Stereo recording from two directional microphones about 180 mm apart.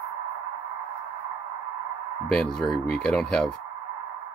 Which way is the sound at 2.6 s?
5° left (ahead or behind).